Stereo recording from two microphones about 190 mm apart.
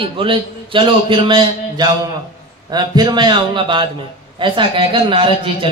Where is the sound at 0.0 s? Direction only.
25° right (ahead or behind).